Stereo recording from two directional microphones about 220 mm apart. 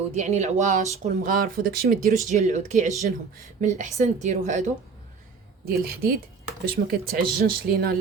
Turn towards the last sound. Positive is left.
turn(degrees=-45)  # may be behind; listen again after turning